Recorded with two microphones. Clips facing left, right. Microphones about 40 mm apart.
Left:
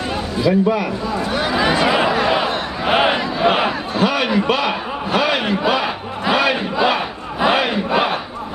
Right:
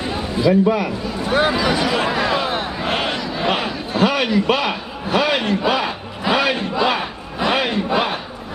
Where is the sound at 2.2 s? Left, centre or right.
Left.